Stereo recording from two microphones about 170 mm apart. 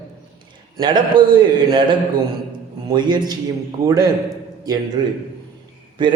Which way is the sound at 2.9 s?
25° right (ahead or behind).